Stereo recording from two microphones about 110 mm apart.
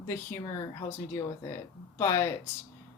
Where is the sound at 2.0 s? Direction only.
25° left (ahead or behind).